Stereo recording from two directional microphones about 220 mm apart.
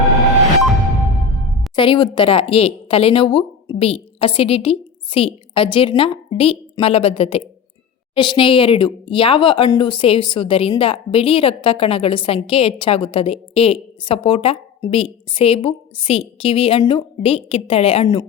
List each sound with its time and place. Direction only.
1.7 s speech: 20° left (ahead or behind)